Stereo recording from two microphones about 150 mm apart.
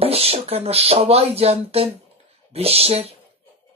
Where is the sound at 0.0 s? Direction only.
40° right (ahead or behind).